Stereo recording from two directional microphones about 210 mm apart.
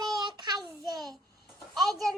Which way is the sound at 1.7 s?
Centre (ahead or behind).